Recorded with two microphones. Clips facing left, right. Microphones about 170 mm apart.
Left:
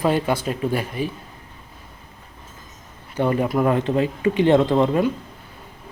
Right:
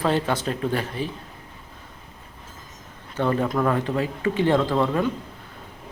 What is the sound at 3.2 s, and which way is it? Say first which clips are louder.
Speech: left 2 dB; 15° left (ahead or behind).